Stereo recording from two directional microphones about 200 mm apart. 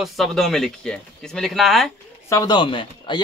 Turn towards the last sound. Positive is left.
turn(degrees=25)  # may be behind; listen again after turning